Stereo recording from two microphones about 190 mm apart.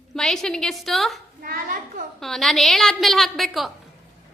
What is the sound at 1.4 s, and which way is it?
Speech, 50° right (ahead or behind).